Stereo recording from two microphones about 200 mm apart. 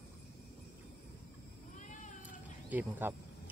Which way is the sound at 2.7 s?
10° right (ahead or behind).